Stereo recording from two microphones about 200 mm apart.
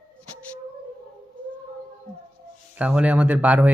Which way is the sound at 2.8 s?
5° right (ahead or behind).